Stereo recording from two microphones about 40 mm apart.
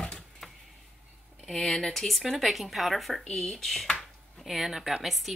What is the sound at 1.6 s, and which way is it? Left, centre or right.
Speech, centre.